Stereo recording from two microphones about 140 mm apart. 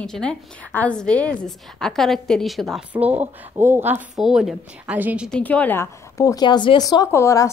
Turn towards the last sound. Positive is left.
turn(degrees=20)  # may be behind; listen again after turning